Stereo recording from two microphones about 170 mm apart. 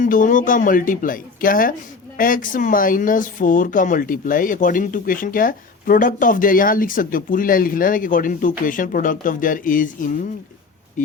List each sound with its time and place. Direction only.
0.0 s speech: 50° left (ahead or behind)